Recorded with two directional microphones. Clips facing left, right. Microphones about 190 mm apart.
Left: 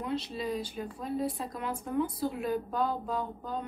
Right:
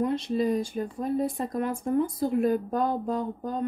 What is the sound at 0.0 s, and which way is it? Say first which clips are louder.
Speech: right 8 dB; 50° right (ahead or behind).